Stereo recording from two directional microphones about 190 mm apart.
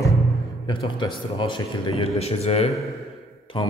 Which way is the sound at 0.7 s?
25° left (ahead or behind).